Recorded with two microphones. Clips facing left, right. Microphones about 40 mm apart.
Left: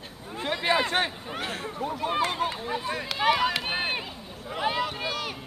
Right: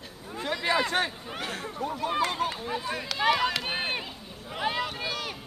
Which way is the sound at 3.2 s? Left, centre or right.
Centre.